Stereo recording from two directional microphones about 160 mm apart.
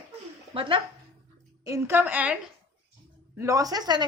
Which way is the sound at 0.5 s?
35° right (ahead or behind).